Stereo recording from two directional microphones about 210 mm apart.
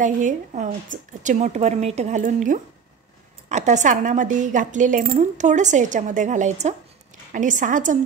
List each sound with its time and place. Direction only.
0.0 s speech: 35° right (ahead or behind)